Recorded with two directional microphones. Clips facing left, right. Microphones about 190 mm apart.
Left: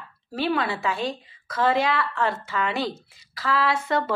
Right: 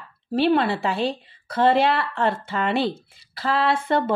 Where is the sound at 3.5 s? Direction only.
55° right (ahead or behind).